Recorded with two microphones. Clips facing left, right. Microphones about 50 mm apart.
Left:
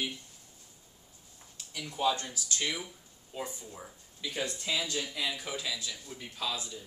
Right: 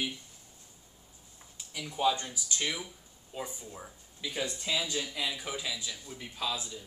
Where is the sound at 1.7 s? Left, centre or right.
Centre.